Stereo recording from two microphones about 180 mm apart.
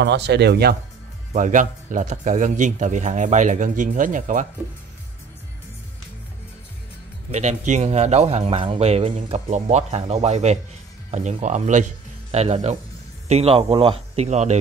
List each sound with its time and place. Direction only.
0.0 s speech: 70° right (ahead or behind)
1.3 s speech: 45° right (ahead or behind)
7.2 s a man's voice: 40° right (ahead or behind)